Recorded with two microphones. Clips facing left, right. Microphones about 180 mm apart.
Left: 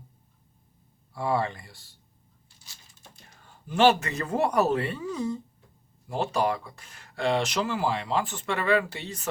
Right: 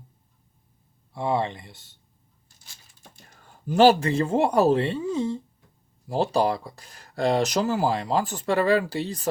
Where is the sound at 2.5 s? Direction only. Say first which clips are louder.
Right 1 dB; 45° right (ahead or behind).